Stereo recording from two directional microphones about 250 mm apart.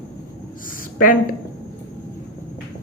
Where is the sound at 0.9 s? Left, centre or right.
Left.